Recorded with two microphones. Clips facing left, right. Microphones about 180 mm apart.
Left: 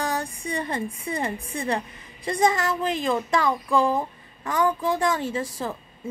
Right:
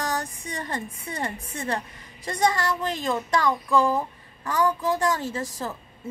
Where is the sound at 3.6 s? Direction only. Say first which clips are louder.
Even; 15° left (ahead or behind).